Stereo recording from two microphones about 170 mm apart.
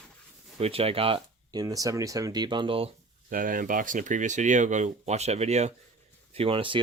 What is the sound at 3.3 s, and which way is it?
Speech, 55° right (ahead or behind).